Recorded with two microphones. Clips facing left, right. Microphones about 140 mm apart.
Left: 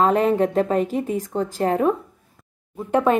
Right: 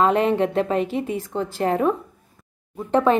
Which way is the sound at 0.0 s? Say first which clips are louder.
Left 1 dB; 40° left (ahead or behind).